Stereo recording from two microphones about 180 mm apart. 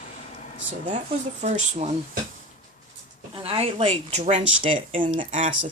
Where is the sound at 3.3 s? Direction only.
30° right (ahead or behind).